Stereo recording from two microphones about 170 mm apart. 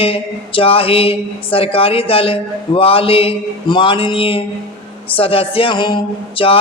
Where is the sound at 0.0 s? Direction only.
35° left (ahead or behind).